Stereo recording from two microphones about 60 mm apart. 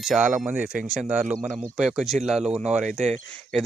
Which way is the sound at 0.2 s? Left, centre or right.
Right.